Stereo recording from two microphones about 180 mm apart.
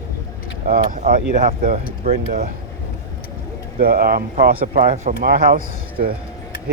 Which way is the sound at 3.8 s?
55° right (ahead or behind).